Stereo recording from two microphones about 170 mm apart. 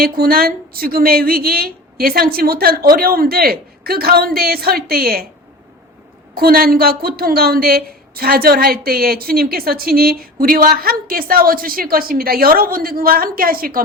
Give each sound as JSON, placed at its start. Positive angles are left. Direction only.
{"t": 0.0, "sound": "a woman's voice", "side_deg": -60}
{"t": 6.3, "sound": "a woman's voice", "side_deg": -60}